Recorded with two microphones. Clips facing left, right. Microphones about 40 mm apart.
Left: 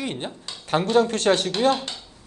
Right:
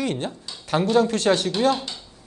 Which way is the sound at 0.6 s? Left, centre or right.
Left.